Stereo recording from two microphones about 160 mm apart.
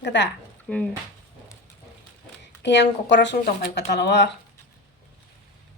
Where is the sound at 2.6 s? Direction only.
90° left.